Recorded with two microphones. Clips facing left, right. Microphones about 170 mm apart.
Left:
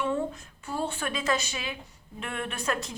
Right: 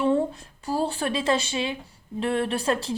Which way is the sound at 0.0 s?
35° right (ahead or behind).